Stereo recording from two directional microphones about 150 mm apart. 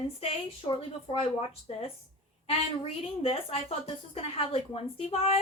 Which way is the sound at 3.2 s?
40° left (ahead or behind).